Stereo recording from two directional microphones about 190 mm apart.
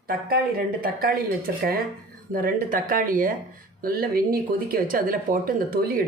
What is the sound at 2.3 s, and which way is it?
Speech, 50° right (ahead or behind).